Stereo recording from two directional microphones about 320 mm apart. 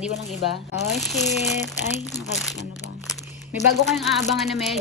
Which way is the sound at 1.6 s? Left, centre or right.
Left.